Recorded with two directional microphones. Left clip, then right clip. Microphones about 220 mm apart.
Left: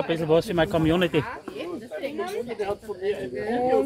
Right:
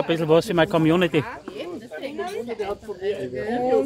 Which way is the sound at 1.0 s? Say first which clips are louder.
Right 2 dB; 15° right (ahead or behind).